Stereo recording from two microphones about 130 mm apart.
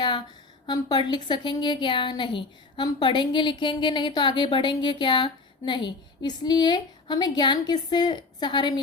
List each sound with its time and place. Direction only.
0.7 s a woman's voice: 35° left (ahead or behind)